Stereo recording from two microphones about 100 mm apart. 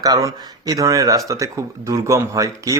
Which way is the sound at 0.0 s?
35° right (ahead or behind).